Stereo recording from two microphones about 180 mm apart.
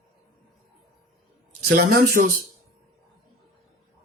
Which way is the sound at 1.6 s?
50° right (ahead or behind).